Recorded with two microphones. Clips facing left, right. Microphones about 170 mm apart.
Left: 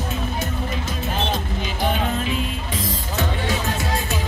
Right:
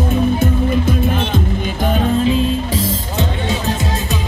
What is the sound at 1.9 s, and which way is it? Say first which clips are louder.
Music: right 9 dB; 30° right (ahead or behind).